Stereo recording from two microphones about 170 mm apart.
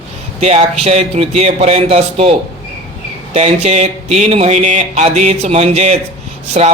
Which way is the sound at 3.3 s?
40° right (ahead or behind).